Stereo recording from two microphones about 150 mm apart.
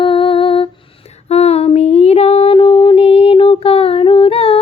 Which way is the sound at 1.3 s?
45° left (ahead or behind).